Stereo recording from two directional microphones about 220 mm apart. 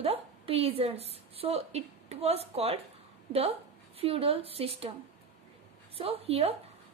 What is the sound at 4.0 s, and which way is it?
Speech, 25° right (ahead or behind).